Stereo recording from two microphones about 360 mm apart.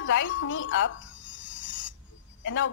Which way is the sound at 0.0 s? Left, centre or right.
Left.